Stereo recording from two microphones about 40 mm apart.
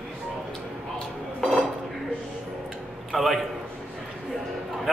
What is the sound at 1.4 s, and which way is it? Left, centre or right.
Dishes, centre.